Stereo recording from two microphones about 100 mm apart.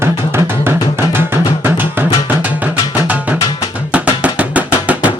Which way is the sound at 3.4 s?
55° left (ahead or behind).